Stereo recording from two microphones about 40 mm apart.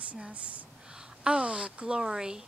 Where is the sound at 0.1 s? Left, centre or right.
Right.